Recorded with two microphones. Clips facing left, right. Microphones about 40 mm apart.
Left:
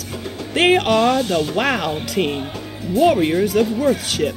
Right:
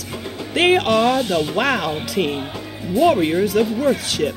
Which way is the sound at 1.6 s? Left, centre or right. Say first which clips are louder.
Even; centre.